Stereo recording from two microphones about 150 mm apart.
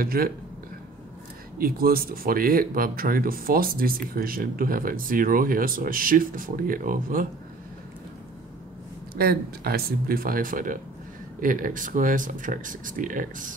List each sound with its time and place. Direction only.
0.0 s speech: 75° right (ahead or behind)
1.6 s speech: 75° right (ahead or behind)
9.1 s speech: 90° right; by 13.6 s 60° right (ahead or behind)